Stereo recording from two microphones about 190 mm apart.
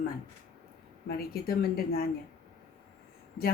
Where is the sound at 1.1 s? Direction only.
55° left (ahead or behind).